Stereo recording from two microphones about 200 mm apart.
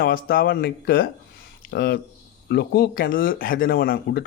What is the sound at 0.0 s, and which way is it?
Speech, 45° left (ahead or behind).